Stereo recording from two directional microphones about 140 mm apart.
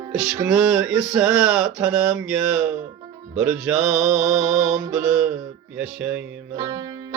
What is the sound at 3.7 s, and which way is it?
Music, 10° right (ahead or behind).